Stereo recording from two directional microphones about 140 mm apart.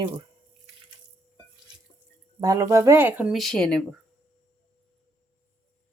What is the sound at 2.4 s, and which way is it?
Speech, 25° right (ahead or behind).